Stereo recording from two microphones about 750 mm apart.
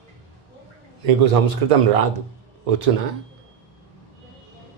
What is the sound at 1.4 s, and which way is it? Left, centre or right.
Speech, right.